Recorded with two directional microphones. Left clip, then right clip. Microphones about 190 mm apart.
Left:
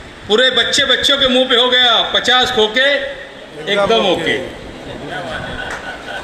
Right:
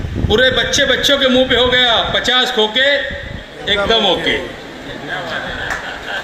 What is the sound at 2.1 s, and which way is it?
A man's voice, 25° left (ahead or behind).